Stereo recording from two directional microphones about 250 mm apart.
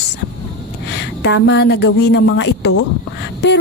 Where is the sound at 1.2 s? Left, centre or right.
Left.